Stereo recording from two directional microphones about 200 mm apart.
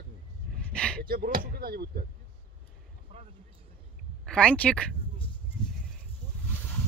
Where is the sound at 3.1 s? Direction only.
30° right (ahead or behind).